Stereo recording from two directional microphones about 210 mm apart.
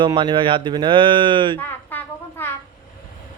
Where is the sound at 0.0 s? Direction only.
20° right (ahead or behind).